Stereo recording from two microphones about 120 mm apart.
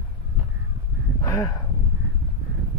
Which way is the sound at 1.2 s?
30° left (ahead or behind).